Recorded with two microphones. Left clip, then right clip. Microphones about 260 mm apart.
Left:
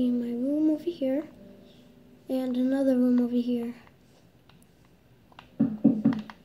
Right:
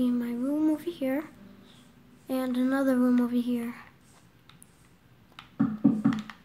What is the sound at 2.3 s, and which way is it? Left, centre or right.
Child singing, centre.